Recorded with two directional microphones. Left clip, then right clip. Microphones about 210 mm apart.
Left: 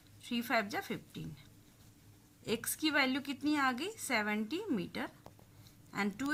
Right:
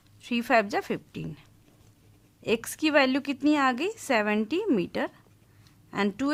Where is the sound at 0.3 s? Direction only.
50° right (ahead or behind).